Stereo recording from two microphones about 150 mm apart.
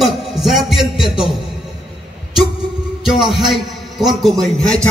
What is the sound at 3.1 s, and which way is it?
A man's voice, centre (ahead or behind).